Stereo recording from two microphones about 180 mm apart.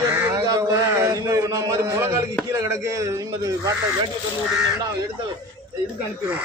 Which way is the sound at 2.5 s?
15° right (ahead or behind).